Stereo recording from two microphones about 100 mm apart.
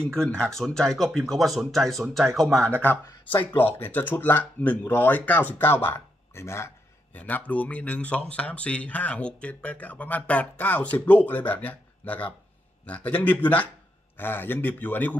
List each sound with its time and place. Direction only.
0.0 s speech: 10° left (ahead or behind)
3.3 s speech: 20° left (ahead or behind)
7.2 s speech: 15° left (ahead or behind)